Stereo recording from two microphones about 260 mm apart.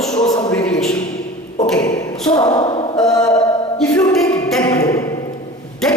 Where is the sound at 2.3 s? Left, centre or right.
Centre.